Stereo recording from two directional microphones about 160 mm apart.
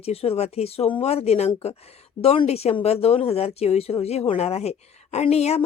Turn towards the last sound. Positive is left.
turn(degrees=40)  # may be behind; listen again after turning